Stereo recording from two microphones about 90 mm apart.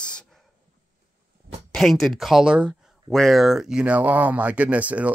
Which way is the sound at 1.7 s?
Centre (ahead or behind).